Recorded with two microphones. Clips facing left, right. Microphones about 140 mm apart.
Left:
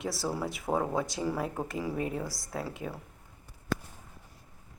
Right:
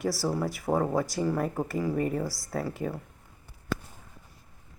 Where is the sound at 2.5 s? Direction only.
Centre (ahead or behind).